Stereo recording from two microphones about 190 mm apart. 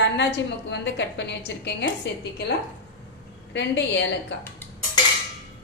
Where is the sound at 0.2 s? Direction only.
65° left (ahead or behind).